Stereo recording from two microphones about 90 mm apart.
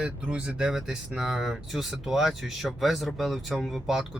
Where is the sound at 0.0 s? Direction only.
10° right (ahead or behind).